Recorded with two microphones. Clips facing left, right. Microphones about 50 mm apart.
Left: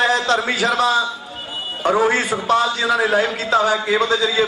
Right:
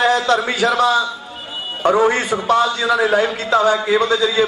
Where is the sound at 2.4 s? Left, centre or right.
Right.